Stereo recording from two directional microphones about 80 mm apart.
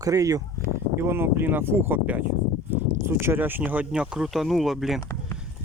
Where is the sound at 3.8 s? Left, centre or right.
Centre.